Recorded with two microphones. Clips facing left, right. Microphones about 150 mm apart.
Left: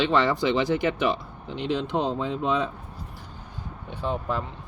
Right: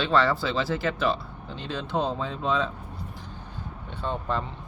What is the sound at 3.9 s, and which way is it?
Speech, 10° left (ahead or behind).